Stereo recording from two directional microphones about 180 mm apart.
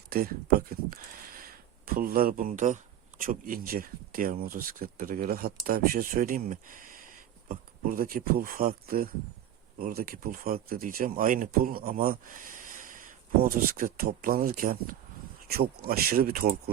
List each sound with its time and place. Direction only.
0.1 s speech: 55° right (ahead or behind)